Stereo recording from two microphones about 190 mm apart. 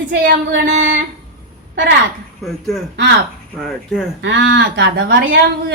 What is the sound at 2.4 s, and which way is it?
Speech, centre (ahead or behind).